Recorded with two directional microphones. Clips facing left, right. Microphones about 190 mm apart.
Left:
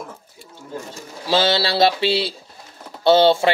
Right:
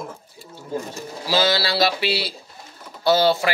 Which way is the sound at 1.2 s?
25° left (ahead or behind).